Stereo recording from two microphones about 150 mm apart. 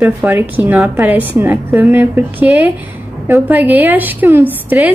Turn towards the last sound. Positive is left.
turn(degrees=-10)  # may be behind; listen again after turning